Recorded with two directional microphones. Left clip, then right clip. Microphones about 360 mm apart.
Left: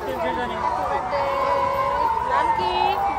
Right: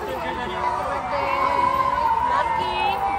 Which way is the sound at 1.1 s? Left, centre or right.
Left.